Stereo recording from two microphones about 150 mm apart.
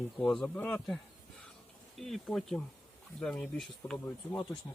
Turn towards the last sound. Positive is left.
turn(degrees=15)  # may be behind; listen again after turning